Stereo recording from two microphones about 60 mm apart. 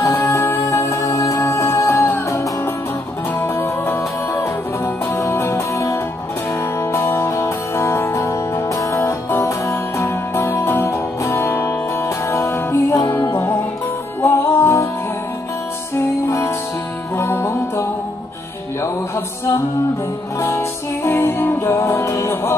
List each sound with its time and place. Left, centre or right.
0.3 s music: left
0.7 s music: left
7.2 s music: left
12.3 s music: left
14.2 s music: left
16.3 s music: left
20.3 s music: left